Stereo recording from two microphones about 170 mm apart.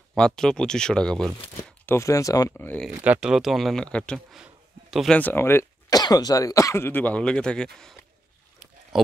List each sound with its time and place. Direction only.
0.1 s speech: 5° left (ahead or behind)
1.9 s speech: 15° left (ahead or behind)
2.9 s speech: 10° right (ahead or behind)